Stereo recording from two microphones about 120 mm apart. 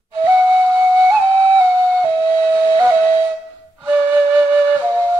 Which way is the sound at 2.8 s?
15° right (ahead or behind).